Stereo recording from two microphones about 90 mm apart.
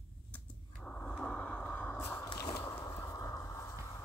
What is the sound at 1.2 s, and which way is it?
Vehicle, 10° left (ahead or behind).